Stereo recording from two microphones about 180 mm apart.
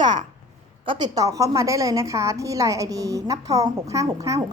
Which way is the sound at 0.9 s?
25° right (ahead or behind).